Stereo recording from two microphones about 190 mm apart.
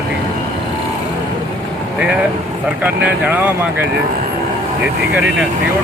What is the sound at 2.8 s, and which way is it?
Speech, 5° right (ahead or behind).